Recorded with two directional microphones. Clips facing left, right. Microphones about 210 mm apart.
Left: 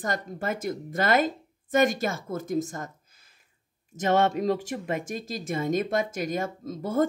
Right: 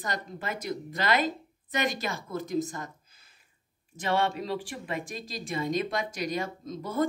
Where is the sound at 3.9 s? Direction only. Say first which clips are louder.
Left 5 dB; 45° left (ahead or behind).